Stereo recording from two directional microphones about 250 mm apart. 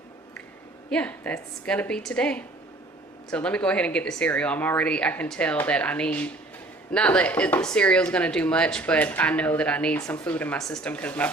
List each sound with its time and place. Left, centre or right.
0.9 s speech: centre